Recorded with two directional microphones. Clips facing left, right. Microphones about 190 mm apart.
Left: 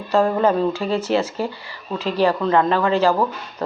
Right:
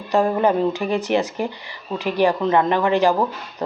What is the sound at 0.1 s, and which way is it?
Speech, 15° right (ahead or behind).